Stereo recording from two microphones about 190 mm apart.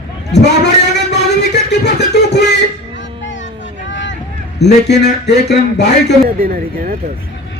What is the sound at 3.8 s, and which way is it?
Vehicle, 75° left (ahead or behind).